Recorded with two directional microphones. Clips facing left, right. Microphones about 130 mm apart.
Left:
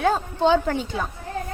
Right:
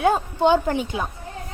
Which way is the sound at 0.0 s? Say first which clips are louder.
Right 2 dB; 10° right (ahead or behind).